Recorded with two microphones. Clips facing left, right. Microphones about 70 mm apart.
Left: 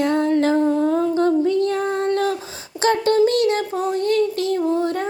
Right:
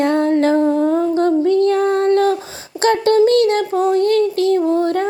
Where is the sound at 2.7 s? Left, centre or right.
Right.